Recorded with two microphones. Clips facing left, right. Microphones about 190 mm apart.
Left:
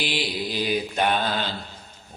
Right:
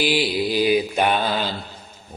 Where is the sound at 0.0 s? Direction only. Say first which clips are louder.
Right 7 dB; 5° right (ahead or behind).